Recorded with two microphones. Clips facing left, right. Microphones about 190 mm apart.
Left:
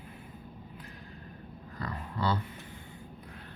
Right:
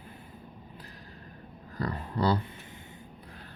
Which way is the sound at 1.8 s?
35° right (ahead or behind).